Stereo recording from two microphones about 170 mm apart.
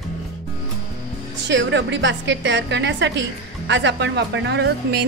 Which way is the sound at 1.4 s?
90° right.